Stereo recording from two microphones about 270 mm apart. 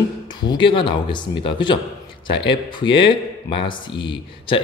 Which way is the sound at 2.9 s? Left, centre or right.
Centre.